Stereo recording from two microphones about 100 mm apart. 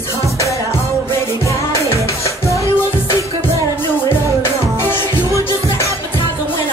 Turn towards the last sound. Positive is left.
turn(degrees=30)  # may be behind; listen again after turning